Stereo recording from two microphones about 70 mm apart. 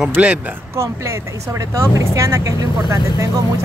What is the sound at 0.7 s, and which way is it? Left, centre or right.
Speech, right.